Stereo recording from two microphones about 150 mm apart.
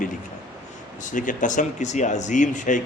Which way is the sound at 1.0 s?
60° left (ahead or behind).